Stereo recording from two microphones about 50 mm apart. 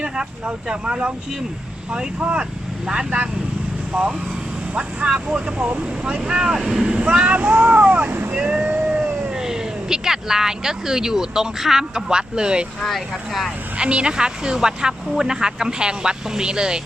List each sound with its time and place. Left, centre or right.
0.0 s speech: centre
4.7 s speech: right
5.6 s speech: right
6.1 s speech: centre; by 8.2 s right
8.4 s vehicle: right
9.4 s speech: centre
12.8 s speech: centre
13.7 s speech: right